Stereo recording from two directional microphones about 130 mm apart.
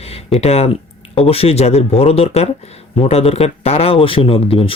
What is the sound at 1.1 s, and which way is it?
Speech, 50° left (ahead or behind).